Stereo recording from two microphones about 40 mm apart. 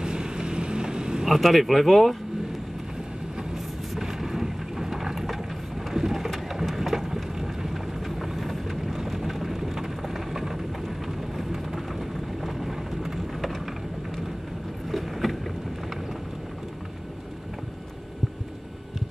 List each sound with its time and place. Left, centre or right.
0.0 s vehicle: right
1.3 s speech: centre
4.0 s vehicle: centre
5.9 s bird: centre
6.7 s vehicle: centre
14.9 s boat: centre